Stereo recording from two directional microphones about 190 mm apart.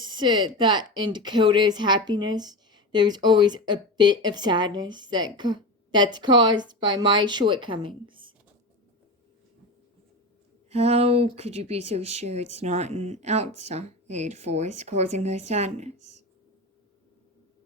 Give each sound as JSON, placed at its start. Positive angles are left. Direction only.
{"t": 0.0, "sound": "speech", "side_deg": -25}
{"t": 10.7, "sound": "speech", "side_deg": -35}